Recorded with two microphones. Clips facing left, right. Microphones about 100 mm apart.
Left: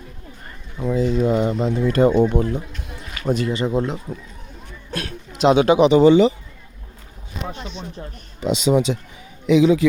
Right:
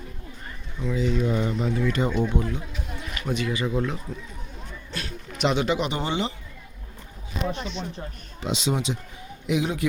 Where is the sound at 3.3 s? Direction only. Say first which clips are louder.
Left 6 dB; 35° left (ahead or behind).